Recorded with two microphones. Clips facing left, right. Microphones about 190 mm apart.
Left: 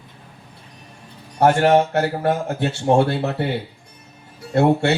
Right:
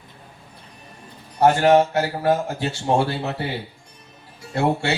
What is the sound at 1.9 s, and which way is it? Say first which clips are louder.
Speech: left 1 dB; 60° left (ahead or behind).